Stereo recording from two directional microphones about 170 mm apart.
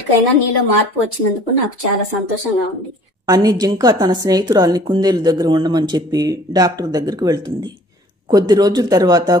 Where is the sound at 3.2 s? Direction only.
20° right (ahead or behind).